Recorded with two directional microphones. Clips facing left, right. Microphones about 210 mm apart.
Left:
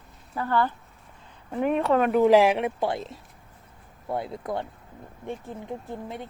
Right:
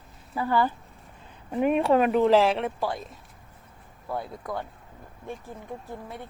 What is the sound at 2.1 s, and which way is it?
Speech, 10° left (ahead or behind).